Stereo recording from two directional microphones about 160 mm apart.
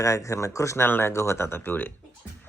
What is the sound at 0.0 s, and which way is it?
Speech, 20° left (ahead or behind).